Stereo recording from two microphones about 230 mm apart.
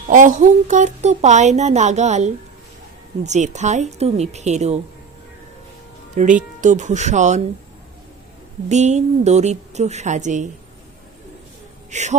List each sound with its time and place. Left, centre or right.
0.1 s a woman's voice: right
6.2 s a woman's voice: right
8.7 s a woman's voice: right
11.9 s speech: right